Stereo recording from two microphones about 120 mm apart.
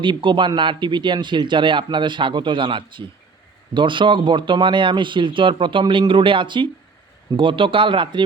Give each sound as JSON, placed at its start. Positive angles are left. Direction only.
{"t": 0.0, "sound": "speech", "side_deg": -40}